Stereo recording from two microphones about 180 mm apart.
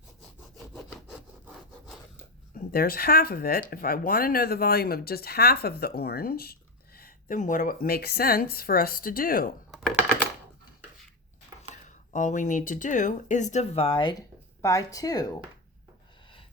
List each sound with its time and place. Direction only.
1.0 s wood: 5° right (ahead or behind)
2.7 s speech: 55° left (ahead or behind)
7.0 s speech: 45° left (ahead or behind)
11.7 s speech: 45° left (ahead or behind); by 15.3 s 20° left (ahead or behind)